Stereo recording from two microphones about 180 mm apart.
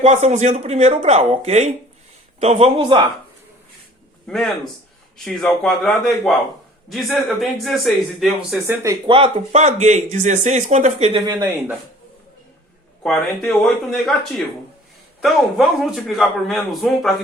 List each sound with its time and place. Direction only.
0.0 s speech: 35° right (ahead or behind)
4.3 s speech: centre (ahead or behind); by 9.0 s 15° right (ahead or behind)
9.0 s speech: 30° right (ahead or behind)
11.1 s speech: 20° right (ahead or behind)
13.0 s speech: 5° left (ahead or behind)